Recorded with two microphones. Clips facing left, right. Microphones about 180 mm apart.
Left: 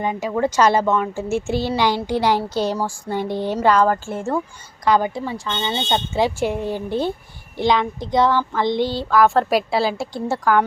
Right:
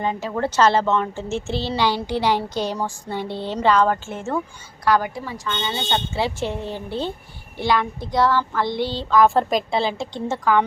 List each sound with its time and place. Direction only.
0.0 s a woman's voice: 15° left (ahead or behind)
4.9 s a woman's voice: 20° left (ahead or behind)